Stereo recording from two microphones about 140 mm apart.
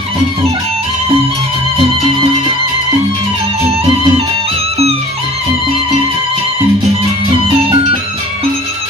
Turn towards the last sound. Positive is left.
turn(degrees=-40)  # may be behind; listen again after turning